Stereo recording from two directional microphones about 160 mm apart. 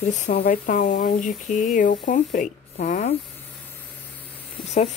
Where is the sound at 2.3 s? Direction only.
50° left (ahead or behind).